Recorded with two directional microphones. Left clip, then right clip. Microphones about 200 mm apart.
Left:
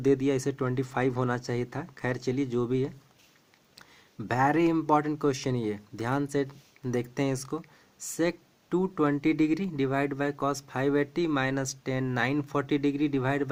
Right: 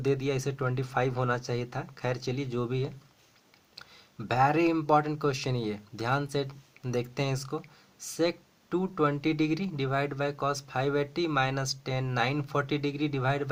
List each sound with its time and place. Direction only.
0.0 s speech: 45° left (ahead or behind)